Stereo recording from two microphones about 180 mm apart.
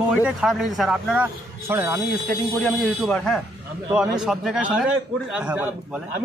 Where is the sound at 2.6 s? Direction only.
5° left (ahead or behind); by 5.7 s 10° right (ahead or behind).